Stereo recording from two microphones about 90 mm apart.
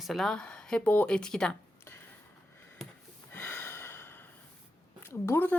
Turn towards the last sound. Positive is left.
turn(degrees=25)  # may be behind; listen again after turning